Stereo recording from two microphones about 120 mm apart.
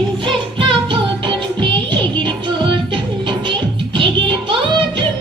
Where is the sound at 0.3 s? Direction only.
45° right (ahead or behind).